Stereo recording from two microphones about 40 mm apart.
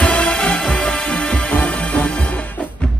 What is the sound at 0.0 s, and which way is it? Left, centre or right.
Music, left.